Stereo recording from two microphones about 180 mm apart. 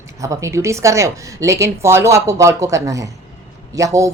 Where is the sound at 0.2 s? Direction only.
15° right (ahead or behind).